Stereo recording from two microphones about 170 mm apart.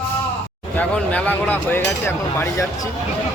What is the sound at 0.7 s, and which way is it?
Speech, 10° left (ahead or behind).